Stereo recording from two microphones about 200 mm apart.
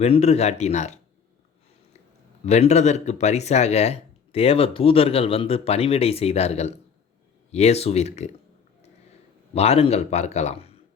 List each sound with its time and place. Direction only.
0.0 s speech: 30° left (ahead or behind)
2.5 s speech: 35° left (ahead or behind)
9.6 s speech: 30° left (ahead or behind)